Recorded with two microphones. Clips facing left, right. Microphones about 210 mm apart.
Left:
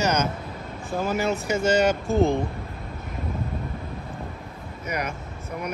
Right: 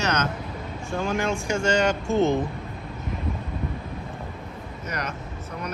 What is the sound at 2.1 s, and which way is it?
Speech, 35° left (ahead or behind).